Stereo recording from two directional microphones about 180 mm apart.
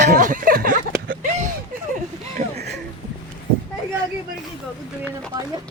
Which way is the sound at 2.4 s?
40° right (ahead or behind).